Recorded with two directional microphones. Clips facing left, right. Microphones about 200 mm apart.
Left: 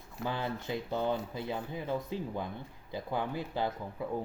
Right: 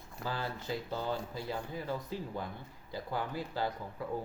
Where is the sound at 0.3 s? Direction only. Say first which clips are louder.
Left 2 dB; 20° left (ahead or behind).